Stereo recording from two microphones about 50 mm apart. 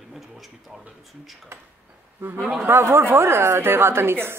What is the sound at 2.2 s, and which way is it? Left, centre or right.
A woman's voice, right.